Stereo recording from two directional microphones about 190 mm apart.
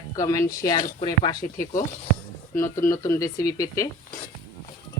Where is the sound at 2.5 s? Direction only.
15° left (ahead or behind).